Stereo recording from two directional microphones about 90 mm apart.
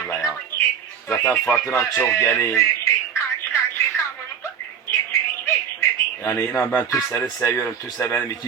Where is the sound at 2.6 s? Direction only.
35° left (ahead or behind).